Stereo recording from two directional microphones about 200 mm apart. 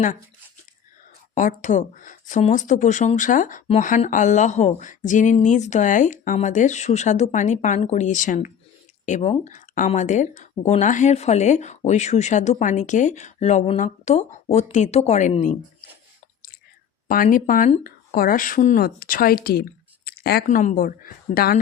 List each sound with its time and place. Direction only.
1.4 s speech: 40° left (ahead or behind)
17.1 s a woman's voice: 45° left (ahead or behind)